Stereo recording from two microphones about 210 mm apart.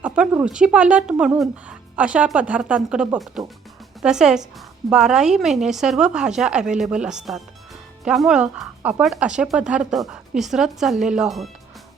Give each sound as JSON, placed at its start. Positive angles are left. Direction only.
{"t": 0.0, "sound": "speech", "side_deg": -5}